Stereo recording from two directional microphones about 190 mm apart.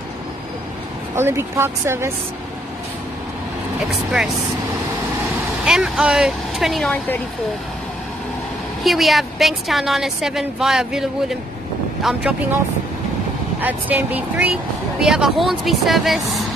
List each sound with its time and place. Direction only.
1.1 s speech: 15° right (ahead or behind)
5.7 s a woman's voice: 5° right (ahead or behind)
8.8 s a woman's voice: centre (ahead or behind)
13.6 s a woman's voice: 10° right (ahead or behind)